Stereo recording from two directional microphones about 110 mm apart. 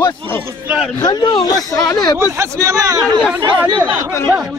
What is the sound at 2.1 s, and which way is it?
Speech, 25° right (ahead or behind).